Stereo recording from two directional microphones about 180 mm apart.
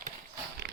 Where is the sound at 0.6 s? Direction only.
65° right (ahead or behind).